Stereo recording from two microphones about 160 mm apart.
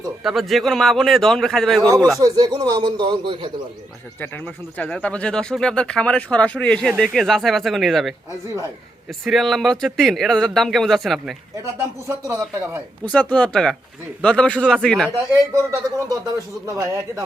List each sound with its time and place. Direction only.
0.2 s speech: centre (ahead or behind)
2.1 s speech: 25° right (ahead or behind)
4.2 s speech: 5° left (ahead or behind)
8.4 s speech: 20° right (ahead or behind)
9.2 s speech: centre (ahead or behind)
11.5 s speech: 20° right (ahead or behind)
13.1 s speech: 10° left (ahead or behind)
15.8 s speech: 25° right (ahead or behind)